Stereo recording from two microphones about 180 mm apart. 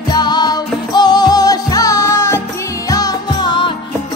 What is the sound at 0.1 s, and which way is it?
Music, 25° left (ahead or behind).